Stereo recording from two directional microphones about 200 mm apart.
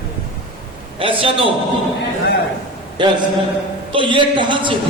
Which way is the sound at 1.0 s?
25° right (ahead or behind).